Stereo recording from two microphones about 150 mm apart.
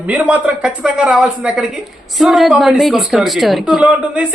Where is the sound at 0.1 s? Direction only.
10° right (ahead or behind).